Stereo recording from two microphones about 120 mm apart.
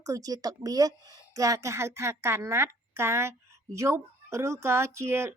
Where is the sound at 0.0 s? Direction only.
30° right (ahead or behind).